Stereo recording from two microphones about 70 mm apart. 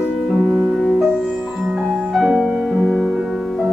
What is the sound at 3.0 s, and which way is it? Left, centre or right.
Music, centre.